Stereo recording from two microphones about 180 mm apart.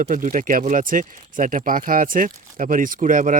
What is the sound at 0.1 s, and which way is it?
A man's voice, 45° right (ahead or behind).